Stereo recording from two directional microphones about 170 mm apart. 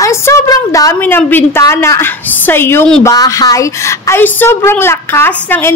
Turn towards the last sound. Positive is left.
turn(degrees=15)  # may be behind; listen again after turning